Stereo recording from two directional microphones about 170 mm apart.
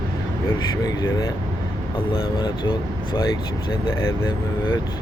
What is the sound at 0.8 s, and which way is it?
Speech, 20° left (ahead or behind).